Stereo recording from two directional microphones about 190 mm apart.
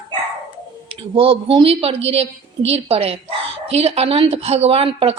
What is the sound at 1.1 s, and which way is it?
A woman's voice, 30° right (ahead or behind).